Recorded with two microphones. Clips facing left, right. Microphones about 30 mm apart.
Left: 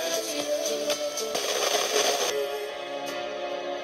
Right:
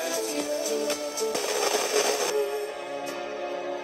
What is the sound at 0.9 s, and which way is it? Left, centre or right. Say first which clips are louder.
Music: even; left.